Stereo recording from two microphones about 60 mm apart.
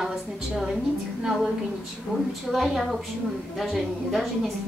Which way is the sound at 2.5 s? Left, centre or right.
Centre.